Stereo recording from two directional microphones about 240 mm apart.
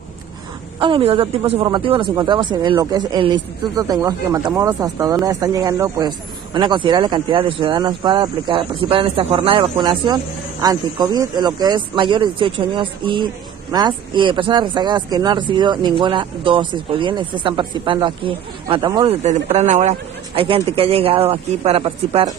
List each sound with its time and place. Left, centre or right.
0.7 s speech: right